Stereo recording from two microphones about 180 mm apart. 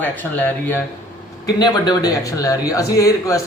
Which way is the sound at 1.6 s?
20° left (ahead or behind).